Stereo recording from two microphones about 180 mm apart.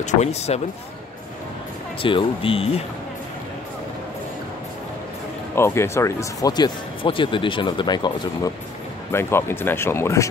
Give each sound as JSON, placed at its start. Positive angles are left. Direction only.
{"t": 0.0, "sound": "speech", "side_deg": 40}
{"t": 2.0, "sound": "speech", "side_deg": 30}
{"t": 5.6, "sound": "speech", "side_deg": 15}